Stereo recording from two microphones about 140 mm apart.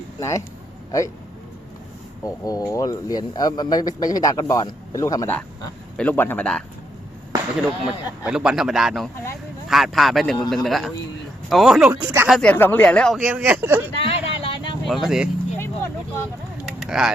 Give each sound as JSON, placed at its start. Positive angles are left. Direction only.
{"t": 0.2, "sound": "speech", "side_deg": 25}
{"t": 2.2, "sound": "speech", "side_deg": 25}
{"t": 7.9, "sound": "speech", "side_deg": -5}
{"t": 12.3, "sound": "speech", "side_deg": 10}
{"t": 13.1, "sound": "speech", "side_deg": -10}
{"t": 14.0, "sound": "a sound", "side_deg": 40}
{"t": 14.8, "sound": "speech", "side_deg": 0}
{"t": 15.5, "sound": "vehicle", "side_deg": 15}
{"t": 16.6, "sound": "a sound", "side_deg": -5}